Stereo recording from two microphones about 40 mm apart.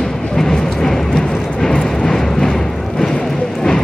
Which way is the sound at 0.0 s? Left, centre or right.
Centre.